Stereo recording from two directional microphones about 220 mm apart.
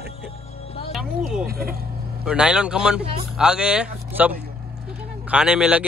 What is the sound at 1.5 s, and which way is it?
Speech, 45° right (ahead or behind).